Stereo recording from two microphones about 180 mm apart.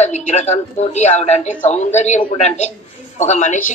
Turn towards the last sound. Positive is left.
turn(degrees=40)  # may be behind; listen again after turning